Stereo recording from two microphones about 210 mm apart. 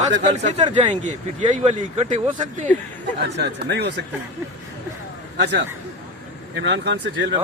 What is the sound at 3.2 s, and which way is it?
Speech, 55° right (ahead or behind).